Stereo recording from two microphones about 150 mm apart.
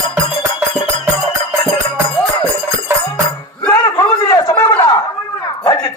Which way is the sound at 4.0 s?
25° left (ahead or behind).